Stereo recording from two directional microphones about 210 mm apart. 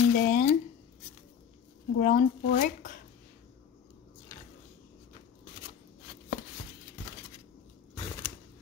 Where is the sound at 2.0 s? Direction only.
40° left (ahead or behind).